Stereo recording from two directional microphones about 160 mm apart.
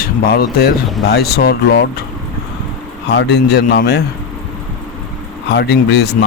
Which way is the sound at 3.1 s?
90° left.